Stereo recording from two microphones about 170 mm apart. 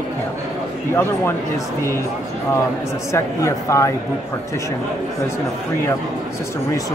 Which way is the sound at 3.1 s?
15° left (ahead or behind).